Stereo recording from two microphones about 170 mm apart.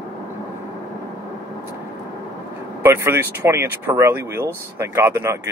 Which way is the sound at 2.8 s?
15° right (ahead or behind).